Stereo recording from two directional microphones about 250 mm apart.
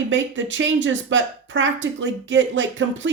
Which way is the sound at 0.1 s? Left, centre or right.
Right.